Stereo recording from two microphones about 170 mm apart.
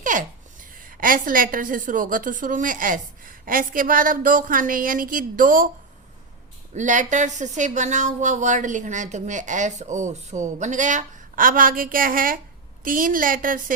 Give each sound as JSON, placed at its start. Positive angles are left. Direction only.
{"t": 0.0, "sound": "a sound", "side_deg": -50}
{"t": 0.8, "sound": "speech", "side_deg": -55}
{"t": 6.7, "sound": "a woman's voice", "side_deg": -45}